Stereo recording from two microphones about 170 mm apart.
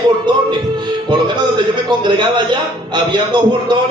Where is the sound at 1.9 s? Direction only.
25° right (ahead or behind).